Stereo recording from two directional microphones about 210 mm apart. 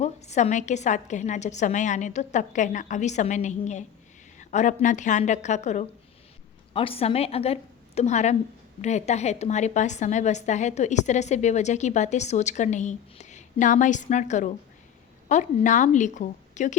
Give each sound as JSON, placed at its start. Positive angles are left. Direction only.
{"t": 0.0, "sound": "a woman's voice", "side_deg": 30}